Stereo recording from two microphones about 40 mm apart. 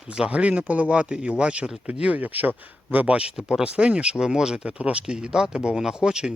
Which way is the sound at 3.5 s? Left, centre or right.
Right.